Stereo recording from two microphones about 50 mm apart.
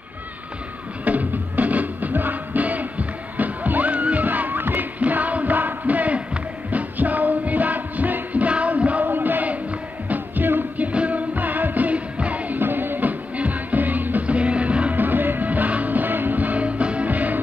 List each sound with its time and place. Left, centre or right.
1.0 s music: right
5.0 s music: right
10.9 s music: right
12.5 s music: right
15.0 s music: right